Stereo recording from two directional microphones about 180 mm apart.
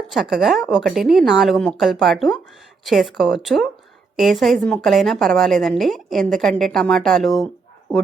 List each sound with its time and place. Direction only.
0.1 s a woman's voice: centre (ahead or behind)